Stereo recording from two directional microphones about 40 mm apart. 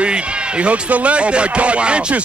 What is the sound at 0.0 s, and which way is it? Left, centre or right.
Speech, right.